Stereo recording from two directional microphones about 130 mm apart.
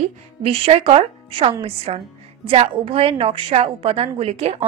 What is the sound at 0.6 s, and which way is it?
A woman's voice, 50° right (ahead or behind).